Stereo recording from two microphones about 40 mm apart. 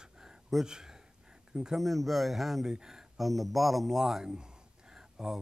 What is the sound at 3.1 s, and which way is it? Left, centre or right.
Speech, centre.